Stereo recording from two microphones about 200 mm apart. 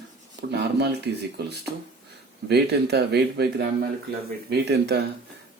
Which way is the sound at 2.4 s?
55° right (ahead or behind).